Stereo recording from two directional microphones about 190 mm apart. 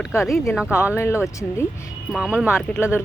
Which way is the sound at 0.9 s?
15° left (ahead or behind).